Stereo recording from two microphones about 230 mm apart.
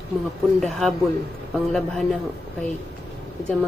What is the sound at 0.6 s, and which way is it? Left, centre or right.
Speech, centre.